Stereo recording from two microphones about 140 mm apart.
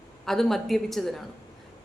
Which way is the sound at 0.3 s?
Centre (ahead or behind).